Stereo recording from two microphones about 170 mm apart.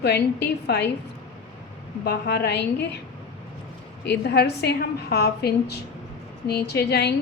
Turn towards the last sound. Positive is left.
turn(degrees=75)  # may be behind; listen again after turning